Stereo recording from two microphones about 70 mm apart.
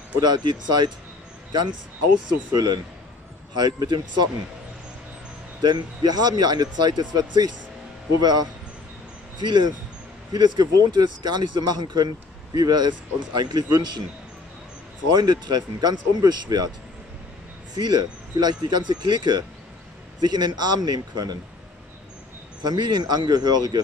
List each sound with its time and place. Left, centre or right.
0.2 s speech: right
2.2 s speech: right
3.5 s speech: right
5.6 s speech: right
15.0 s speech: right
17.7 s speech: right
22.6 s speech: right